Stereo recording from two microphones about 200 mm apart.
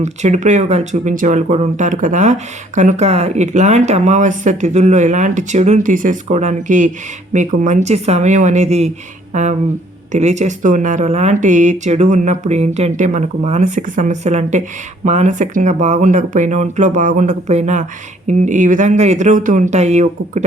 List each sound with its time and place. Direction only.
0.0 s speech: 35° right (ahead or behind)